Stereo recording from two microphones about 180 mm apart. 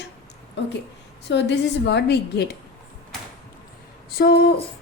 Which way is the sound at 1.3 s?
75° left (ahead or behind).